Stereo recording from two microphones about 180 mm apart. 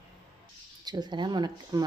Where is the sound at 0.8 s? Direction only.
25° right (ahead or behind).